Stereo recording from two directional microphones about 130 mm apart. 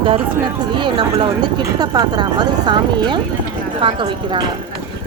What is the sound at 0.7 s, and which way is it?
Speech, 40° right (ahead or behind).